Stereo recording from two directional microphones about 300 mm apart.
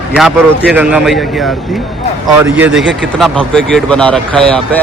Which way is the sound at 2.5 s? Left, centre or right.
Centre.